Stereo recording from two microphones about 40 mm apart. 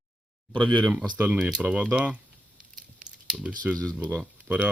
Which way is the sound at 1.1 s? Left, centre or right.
Right.